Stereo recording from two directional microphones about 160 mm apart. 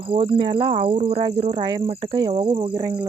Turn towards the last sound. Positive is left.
turn(degrees=-25)  # may be behind; listen again after turning